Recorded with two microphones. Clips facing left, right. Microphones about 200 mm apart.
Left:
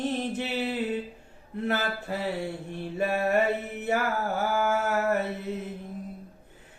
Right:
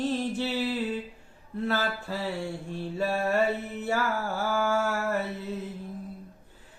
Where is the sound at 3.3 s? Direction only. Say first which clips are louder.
Left 1 dB; 20° left (ahead or behind).